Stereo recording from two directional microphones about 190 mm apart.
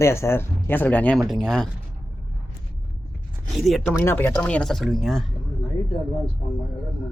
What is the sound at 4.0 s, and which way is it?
Speech, 10° left (ahead or behind).